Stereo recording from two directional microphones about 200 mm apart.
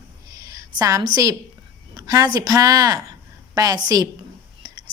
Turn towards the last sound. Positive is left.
turn(degrees=-20)  # may be behind; listen again after turning